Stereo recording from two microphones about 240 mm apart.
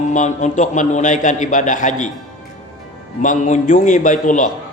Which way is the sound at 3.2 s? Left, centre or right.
Left.